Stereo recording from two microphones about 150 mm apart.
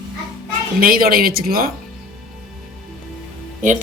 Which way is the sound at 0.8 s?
75° right (ahead or behind).